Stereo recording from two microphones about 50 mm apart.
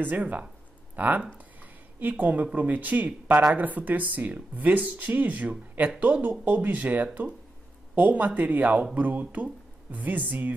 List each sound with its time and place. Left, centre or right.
0.0 s speech: right